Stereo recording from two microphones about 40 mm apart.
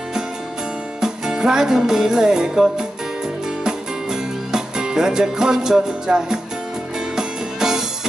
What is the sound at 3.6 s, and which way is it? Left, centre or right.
Music, centre.